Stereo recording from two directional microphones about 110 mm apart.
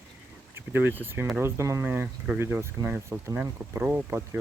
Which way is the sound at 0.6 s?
20° right (ahead or behind).